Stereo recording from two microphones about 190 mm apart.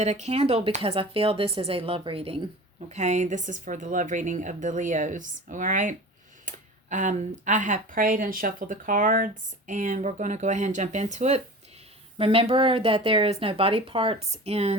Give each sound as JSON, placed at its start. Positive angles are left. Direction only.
{"t": 0.0, "sound": "speech", "side_deg": -35}